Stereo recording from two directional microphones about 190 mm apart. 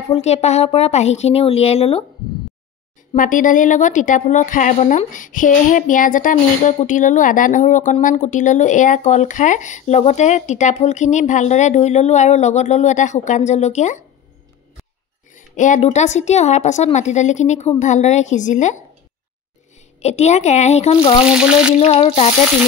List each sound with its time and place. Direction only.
0.1 s a woman's voice: 35° left (ahead or behind)
3.2 s a woman's voice: 45° left (ahead or behind)
15.3 s a woman's voice: 40° left (ahead or behind)
20.0 s a woman's voice: 35° left (ahead or behind)
21.3 s speech: 5° right (ahead or behind)
21.7 s a woman's voice: 35° left (ahead or behind)